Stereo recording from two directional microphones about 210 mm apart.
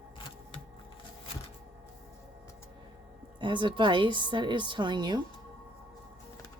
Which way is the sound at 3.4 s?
25° right (ahead or behind).